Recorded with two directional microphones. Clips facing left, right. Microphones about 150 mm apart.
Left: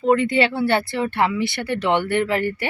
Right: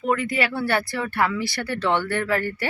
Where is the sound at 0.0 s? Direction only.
25° left (ahead or behind).